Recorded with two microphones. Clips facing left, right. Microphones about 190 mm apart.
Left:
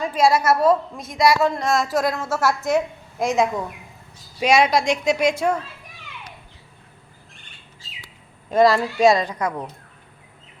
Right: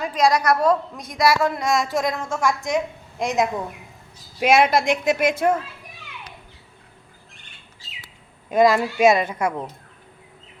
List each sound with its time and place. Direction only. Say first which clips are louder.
0.0 s a woman's voice: left 1 dB; 5° left (ahead or behind)
4.4 s a woman's voice: even; 55° right (ahead or behind)
8.5 s speech: even; 20° right (ahead or behind)